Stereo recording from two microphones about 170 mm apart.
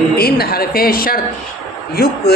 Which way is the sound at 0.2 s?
65° left (ahead or behind).